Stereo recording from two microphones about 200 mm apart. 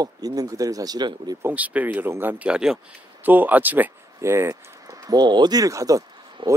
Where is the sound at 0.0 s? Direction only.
20° right (ahead or behind).